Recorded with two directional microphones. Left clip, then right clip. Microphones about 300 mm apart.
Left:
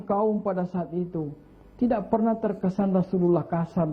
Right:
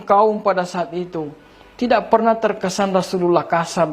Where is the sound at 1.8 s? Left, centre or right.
Centre.